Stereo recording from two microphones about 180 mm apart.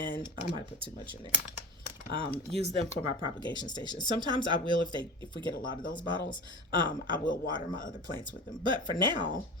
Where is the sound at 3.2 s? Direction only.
25° right (ahead or behind).